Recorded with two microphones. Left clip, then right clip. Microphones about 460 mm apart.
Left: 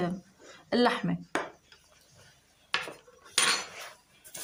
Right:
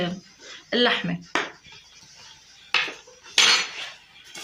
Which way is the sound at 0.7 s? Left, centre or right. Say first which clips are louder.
Right 5 dB; left.